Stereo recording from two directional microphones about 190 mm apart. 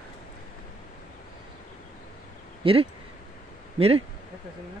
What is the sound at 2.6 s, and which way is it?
Speech, 25° right (ahead or behind).